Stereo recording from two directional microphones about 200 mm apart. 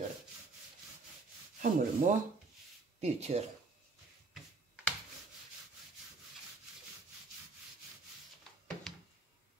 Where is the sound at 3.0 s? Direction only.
35° right (ahead or behind).